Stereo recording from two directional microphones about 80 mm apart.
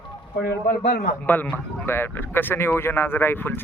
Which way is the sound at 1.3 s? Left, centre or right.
Left.